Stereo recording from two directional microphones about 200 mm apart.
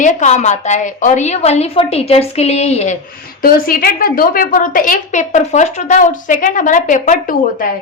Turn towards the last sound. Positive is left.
turn(degrees=40)  # may be behind; listen again after turning